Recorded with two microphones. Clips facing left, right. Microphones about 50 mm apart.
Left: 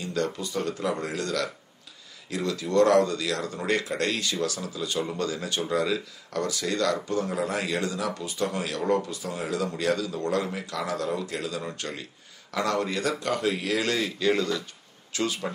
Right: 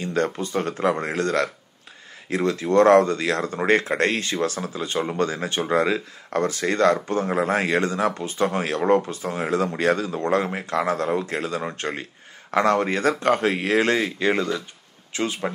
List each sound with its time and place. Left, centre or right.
0.0 s speech: right